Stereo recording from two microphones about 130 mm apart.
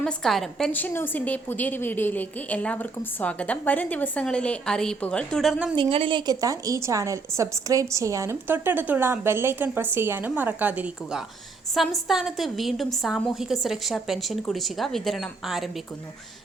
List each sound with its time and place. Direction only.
0.0 s a woman's voice: 5° left (ahead or behind)
0.7 s a woman's voice: 15° left (ahead or behind); by 5.7 s 5° right (ahead or behind)
5.7 s a woman's voice: 40° right (ahead or behind); by 11.2 s 10° right (ahead or behind)
11.7 s a woman's voice: centre (ahead or behind)